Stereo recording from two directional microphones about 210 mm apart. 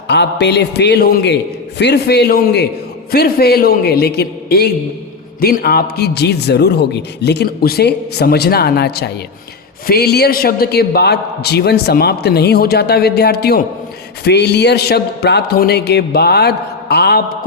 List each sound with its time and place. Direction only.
0.1 s a man's voice: 55° left (ahead or behind)